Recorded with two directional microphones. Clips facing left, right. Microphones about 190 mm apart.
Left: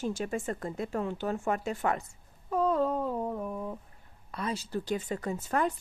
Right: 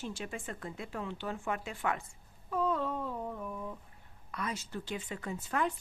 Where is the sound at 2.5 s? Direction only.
40° left (ahead or behind).